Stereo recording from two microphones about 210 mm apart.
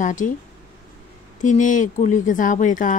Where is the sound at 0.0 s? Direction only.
35° left (ahead or behind).